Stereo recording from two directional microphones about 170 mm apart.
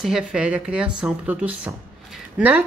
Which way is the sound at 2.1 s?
10° right (ahead or behind).